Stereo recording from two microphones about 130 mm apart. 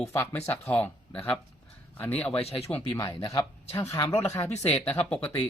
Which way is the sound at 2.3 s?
50° left (ahead or behind).